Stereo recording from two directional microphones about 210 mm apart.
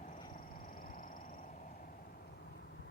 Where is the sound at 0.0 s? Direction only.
40° left (ahead or behind).